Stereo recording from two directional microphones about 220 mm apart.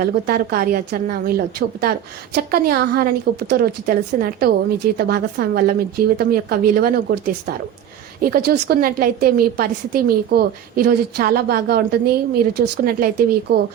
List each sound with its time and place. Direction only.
0.0 s a woman's voice: 45° right (ahead or behind)